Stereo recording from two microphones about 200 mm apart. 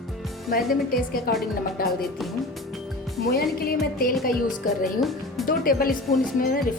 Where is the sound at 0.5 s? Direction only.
45° left (ahead or behind).